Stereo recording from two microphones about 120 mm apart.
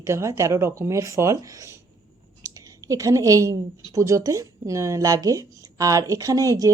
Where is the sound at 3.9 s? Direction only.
25° right (ahead or behind).